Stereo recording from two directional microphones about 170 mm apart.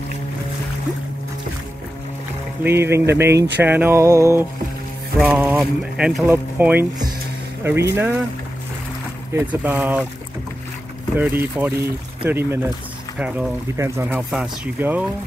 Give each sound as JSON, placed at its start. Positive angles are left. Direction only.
{"t": 2.6, "sound": "speech", "side_deg": -15}
{"t": 9.3, "sound": "speech", "side_deg": -10}
{"t": 11.1, "sound": "speech", "side_deg": -10}
{"t": 13.7, "sound": "speech", "side_deg": -15}
{"t": 14.0, "sound": "speech", "side_deg": -5}